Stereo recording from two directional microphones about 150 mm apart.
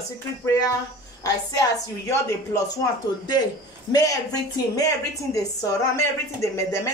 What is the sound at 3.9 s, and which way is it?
Speech, 25° left (ahead or behind).